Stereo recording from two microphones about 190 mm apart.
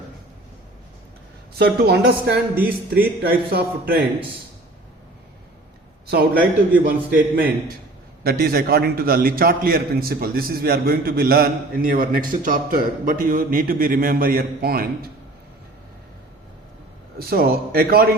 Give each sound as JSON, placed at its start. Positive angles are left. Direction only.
{"t": 1.5, "sound": "a man's voice", "side_deg": -55}
{"t": 6.1, "sound": "a man's voice", "side_deg": -55}
{"t": 17.2, "sound": "a man's voice", "side_deg": -55}